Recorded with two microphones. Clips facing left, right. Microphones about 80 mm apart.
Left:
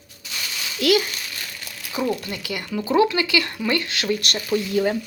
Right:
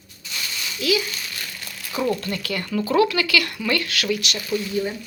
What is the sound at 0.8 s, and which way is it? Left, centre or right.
Speech, left.